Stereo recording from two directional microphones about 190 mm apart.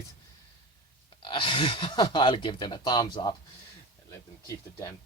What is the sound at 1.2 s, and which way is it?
Speech, 25° left (ahead or behind).